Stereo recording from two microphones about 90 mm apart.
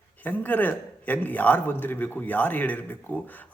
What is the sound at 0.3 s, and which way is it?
A man's voice, 20° left (ahead or behind).